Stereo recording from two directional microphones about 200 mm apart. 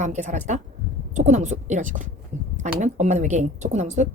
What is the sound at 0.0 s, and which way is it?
A woman's voice, 40° right (ahead or behind).